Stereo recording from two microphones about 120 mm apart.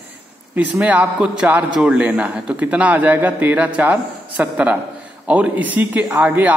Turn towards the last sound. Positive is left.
turn(degrees=-5)  # may be behind; listen again after turning